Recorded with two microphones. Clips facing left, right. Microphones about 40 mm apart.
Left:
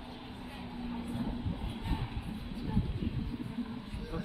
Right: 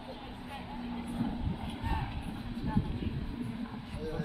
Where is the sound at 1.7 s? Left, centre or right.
Right.